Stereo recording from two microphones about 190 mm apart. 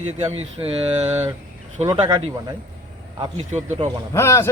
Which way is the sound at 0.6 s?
35° right (ahead or behind).